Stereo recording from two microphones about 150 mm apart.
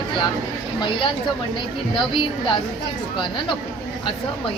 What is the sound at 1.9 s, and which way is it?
Speech, 30° left (ahead or behind).